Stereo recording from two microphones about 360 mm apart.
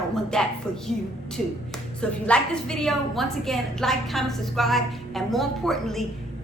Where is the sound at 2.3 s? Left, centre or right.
Centre.